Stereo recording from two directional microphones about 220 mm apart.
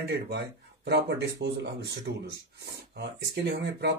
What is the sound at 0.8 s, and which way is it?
Speech, 50° right (ahead or behind).